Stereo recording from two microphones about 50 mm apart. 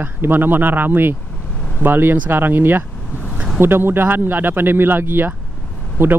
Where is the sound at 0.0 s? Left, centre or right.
Right.